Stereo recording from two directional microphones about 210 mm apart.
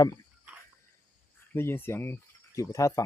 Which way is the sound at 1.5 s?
10° left (ahead or behind).